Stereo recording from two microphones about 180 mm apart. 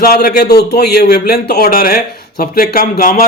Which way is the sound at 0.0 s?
60° left (ahead or behind).